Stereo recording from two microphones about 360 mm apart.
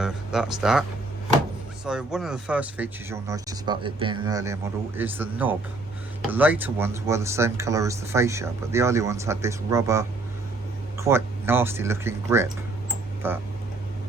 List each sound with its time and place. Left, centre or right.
0.0 s speech: centre